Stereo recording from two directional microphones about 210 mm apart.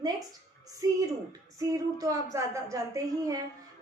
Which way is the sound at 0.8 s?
15° right (ahead or behind).